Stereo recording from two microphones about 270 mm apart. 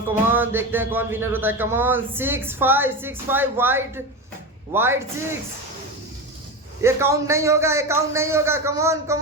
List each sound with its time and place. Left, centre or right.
0.3 s speech: centre
6.8 s speech: centre